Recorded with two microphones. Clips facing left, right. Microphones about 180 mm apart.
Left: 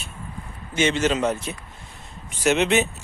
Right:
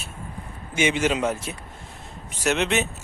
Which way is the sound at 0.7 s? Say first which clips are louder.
Left 1 dB; 10° right (ahead or behind).